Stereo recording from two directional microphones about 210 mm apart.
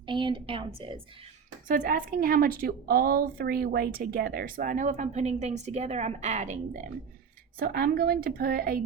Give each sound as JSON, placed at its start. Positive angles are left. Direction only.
{"t": 0.1, "sound": "a woman's voice", "side_deg": -25}
{"t": 1.6, "sound": "a woman's voice", "side_deg": -40}
{"t": 7.6, "sound": "speech", "side_deg": -45}